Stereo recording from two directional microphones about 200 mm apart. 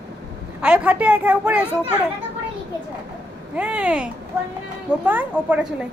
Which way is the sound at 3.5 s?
5° right (ahead or behind).